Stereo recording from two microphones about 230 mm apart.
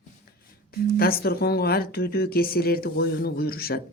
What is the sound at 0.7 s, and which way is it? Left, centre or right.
Speech, left.